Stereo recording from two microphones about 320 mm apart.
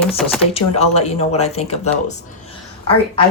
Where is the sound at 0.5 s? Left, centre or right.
Centre.